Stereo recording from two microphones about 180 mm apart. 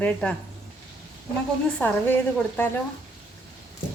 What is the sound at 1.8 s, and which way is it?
Speech, 5° left (ahead or behind).